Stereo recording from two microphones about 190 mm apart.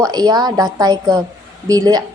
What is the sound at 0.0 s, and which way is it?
A woman's voice, 20° right (ahead or behind).